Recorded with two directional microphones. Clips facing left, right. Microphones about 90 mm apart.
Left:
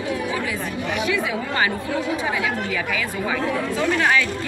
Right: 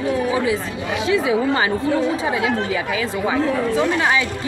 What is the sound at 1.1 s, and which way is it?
Speech, 25° right (ahead or behind).